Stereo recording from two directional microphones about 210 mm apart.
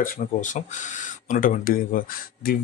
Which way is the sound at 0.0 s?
40° left (ahead or behind).